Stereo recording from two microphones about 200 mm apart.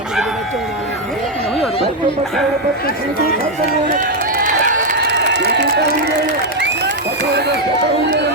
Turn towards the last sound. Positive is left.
turn(degrees=-55)  # may be behind; listen again after turning